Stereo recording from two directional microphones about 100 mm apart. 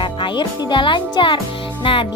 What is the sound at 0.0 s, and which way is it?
A child's voice, 55° left (ahead or behind).